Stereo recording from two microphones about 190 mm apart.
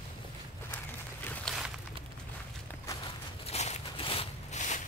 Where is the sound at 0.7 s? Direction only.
10° left (ahead or behind).